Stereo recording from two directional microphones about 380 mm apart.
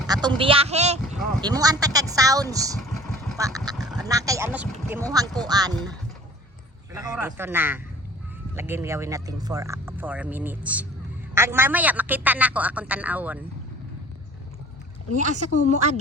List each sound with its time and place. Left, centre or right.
0.1 s speech: centre
6.9 s a man's voice: centre
15.1 s speech: centre